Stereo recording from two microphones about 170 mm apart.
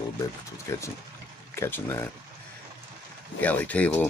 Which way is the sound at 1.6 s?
15° left (ahead or behind).